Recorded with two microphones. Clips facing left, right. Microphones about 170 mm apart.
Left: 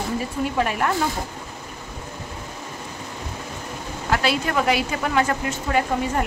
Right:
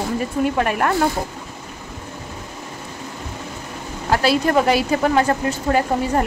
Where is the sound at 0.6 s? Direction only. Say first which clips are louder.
Left 1 dB; 55° right (ahead or behind).